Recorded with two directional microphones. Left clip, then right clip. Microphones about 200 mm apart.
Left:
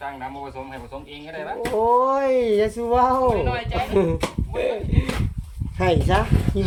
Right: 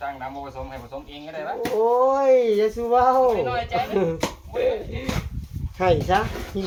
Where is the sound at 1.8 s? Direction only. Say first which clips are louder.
Left 1 dB; 50° left (ahead or behind).